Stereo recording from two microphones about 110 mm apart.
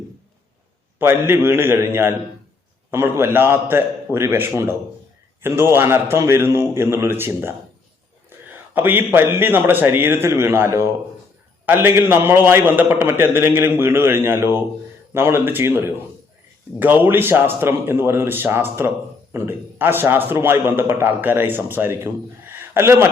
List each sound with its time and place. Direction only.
0.9 s a man's voice: 20° right (ahead or behind)